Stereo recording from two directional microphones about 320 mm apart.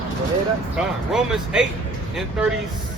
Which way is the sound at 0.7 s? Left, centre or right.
Centre.